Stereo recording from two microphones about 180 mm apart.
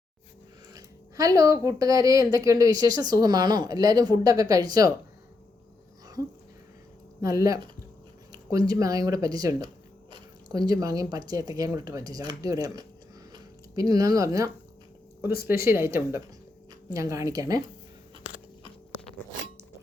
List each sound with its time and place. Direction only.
0.7 s speech: 20° right (ahead or behind)
7.2 s speech: 20° right (ahead or behind)